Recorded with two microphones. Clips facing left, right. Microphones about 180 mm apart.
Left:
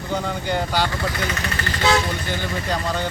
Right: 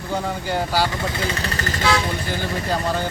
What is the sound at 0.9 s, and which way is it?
Speech, 25° right (ahead or behind).